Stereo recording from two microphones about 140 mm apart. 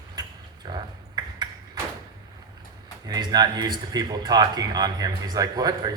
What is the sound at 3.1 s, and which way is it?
A man's voice, 30° right (ahead or behind).